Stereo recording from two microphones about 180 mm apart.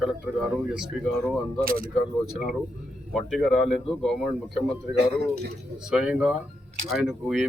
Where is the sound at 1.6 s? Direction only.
50° right (ahead or behind).